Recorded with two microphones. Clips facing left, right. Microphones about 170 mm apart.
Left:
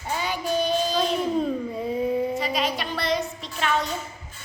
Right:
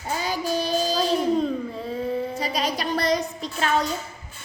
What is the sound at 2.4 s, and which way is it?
Music, 40° right (ahead or behind).